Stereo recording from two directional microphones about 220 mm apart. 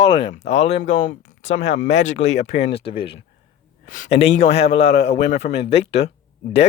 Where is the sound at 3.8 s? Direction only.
35° left (ahead or behind).